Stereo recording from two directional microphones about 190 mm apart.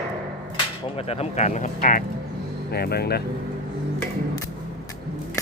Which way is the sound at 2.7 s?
55° left (ahead or behind).